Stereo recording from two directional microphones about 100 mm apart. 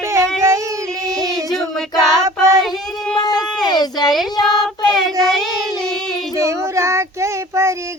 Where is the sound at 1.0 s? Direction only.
35° right (ahead or behind).